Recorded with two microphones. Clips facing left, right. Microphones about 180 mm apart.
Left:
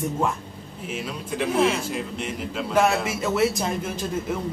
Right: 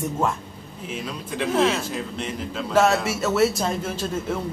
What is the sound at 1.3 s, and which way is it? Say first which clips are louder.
Speech: even; 10° left (ahead or behind).